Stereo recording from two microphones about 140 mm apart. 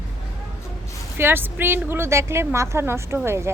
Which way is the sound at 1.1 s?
15° right (ahead or behind).